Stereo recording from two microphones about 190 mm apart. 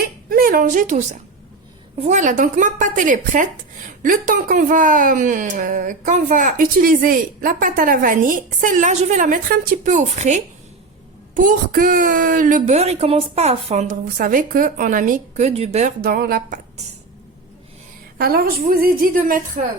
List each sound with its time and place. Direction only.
0.3 s a woman's voice: 50° right (ahead or behind)
2.0 s speech: 40° right (ahead or behind)
16.0 s speech: 50° right (ahead or behind)
18.2 s speech: 55° right (ahead or behind)